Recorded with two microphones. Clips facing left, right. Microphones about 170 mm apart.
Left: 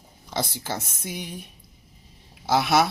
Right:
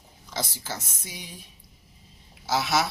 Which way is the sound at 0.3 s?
60° left (ahead or behind).